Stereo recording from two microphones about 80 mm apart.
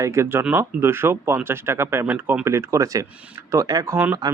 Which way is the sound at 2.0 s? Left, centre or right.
Centre.